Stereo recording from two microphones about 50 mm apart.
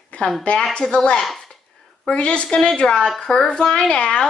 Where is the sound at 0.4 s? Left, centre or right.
Centre.